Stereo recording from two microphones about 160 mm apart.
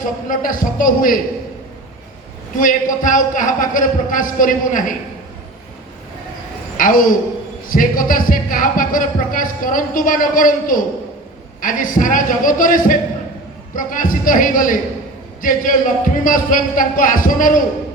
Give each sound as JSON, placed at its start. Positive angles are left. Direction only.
{"t": 0.0, "sound": "speech", "side_deg": 55}
{"t": 2.6, "sound": "speech", "side_deg": 55}
{"t": 6.7, "sound": "a man's voice", "side_deg": 60}